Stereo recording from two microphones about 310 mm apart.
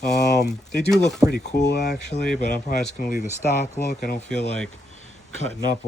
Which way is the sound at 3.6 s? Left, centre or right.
Left.